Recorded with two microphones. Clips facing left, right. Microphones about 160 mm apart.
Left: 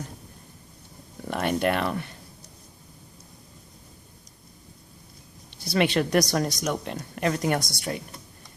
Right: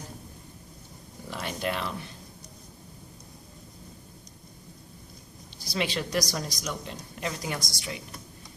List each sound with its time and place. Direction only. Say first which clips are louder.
1.3 s speech: left 7 dB; 60° left (ahead or behind)
5.6 s a woman's voice: left 7 dB; 65° left (ahead or behind)